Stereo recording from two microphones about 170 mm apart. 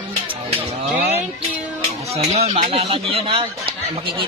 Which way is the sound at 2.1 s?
35° right (ahead or behind).